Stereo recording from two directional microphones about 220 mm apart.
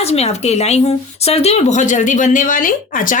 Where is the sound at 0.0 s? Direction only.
30° left (ahead or behind).